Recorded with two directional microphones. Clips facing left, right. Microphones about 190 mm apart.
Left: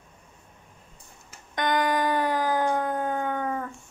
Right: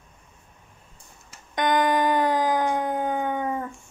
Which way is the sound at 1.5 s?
20° right (ahead or behind).